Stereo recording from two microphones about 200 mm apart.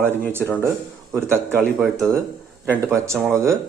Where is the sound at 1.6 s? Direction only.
Centre (ahead or behind).